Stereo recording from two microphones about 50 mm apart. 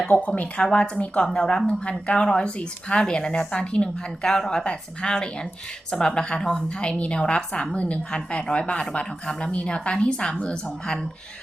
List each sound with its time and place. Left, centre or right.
0.3 s a woman's voice: left